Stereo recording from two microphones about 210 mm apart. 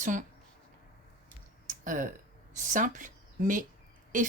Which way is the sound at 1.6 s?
35° right (ahead or behind).